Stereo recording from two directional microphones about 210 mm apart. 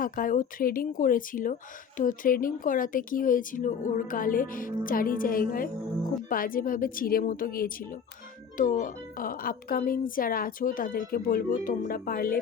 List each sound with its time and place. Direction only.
0.0 s speech: 40° left (ahead or behind)